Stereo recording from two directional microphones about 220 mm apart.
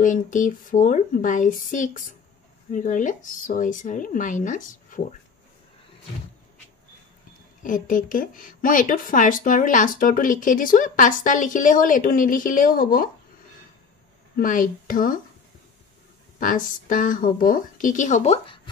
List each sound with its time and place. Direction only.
0.0 s speech: 35° left (ahead or behind)
7.6 s speech: 35° left (ahead or behind)
14.3 s speech: 40° left (ahead or behind)
16.3 s speech: 40° left (ahead or behind)